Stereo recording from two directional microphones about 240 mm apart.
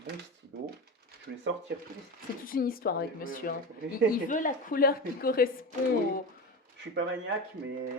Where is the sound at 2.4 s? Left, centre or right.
Left.